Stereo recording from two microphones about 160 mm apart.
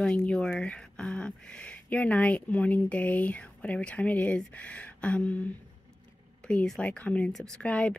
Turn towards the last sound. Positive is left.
turn(degrees=10)  # may be behind; listen again after turning